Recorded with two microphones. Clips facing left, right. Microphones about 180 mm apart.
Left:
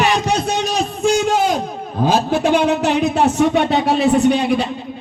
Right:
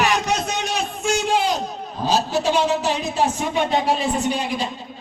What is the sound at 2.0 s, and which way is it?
Speech, 55° left (ahead or behind).